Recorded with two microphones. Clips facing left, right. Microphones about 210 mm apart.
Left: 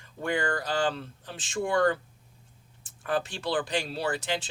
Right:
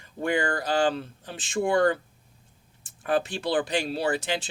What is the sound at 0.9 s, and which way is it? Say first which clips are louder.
Speech: right 4 dB; 15° right (ahead or behind).